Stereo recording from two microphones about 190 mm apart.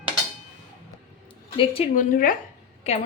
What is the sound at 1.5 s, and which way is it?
Speech, 30° left (ahead or behind).